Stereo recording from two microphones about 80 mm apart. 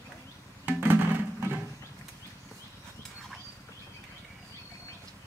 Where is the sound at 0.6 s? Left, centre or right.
Right.